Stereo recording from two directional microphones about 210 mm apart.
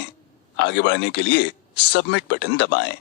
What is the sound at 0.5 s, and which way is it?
Speech, 55° left (ahead or behind).